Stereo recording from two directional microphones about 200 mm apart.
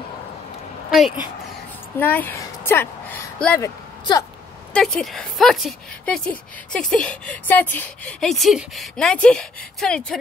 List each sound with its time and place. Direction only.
0.8 s a woman's voice: centre (ahead or behind)
3.6 s a sound: 20° left (ahead or behind)
4.7 s speech: 5° left (ahead or behind)